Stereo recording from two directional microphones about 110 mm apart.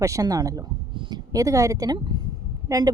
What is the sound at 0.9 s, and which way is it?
Speech, 45° right (ahead or behind).